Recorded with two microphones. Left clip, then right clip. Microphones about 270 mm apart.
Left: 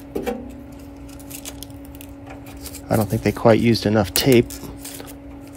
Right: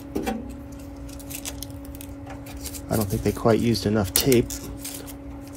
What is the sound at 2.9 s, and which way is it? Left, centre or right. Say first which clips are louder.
Speech: left 5 dB; left.